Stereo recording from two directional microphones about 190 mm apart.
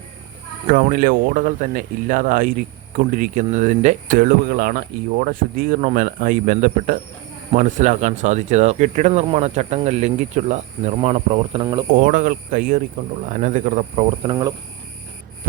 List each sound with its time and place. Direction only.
0.7 s speech: 45° right (ahead or behind); by 11.9 s 20° right (ahead or behind)
11.9 s speech: 45° right (ahead or behind); by 14.5 s 25° right (ahead or behind)